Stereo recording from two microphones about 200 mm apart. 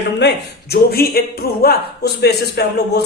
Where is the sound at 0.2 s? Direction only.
55° left (ahead or behind).